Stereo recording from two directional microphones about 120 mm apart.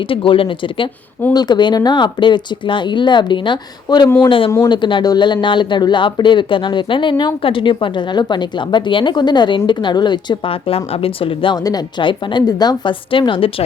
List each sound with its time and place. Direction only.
0.1 s speech: 45° left (ahead or behind)
11.5 s speech: 35° left (ahead or behind)